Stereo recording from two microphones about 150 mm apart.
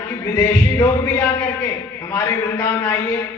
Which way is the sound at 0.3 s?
20° left (ahead or behind).